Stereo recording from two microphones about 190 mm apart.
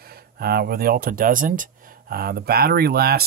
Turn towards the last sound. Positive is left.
turn(degrees=-55)  # may be behind; listen again after turning